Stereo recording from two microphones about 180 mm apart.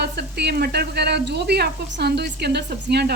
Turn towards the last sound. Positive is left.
turn(degrees=-60)  # may be behind; listen again after turning